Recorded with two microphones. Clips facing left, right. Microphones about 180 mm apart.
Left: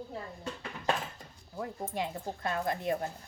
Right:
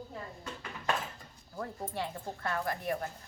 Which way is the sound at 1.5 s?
15° left (ahead or behind).